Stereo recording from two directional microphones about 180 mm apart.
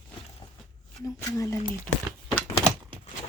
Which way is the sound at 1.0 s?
15° left (ahead or behind).